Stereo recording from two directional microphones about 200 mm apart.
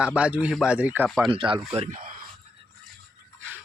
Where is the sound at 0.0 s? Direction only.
5° right (ahead or behind).